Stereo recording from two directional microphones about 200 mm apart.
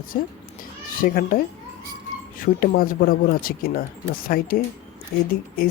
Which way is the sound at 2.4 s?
45° left (ahead or behind).